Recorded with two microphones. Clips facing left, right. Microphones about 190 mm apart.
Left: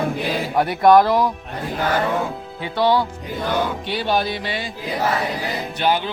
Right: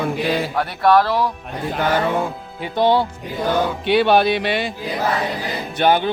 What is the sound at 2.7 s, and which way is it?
Speech, 20° right (ahead or behind).